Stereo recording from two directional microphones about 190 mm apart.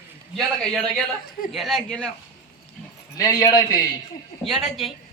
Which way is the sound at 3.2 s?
20° left (ahead or behind).